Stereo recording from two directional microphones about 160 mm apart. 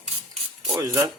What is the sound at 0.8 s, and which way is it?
Speech, 20° right (ahead or behind).